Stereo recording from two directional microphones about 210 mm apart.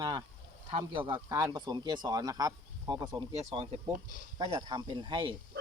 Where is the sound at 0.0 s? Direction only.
20° right (ahead or behind).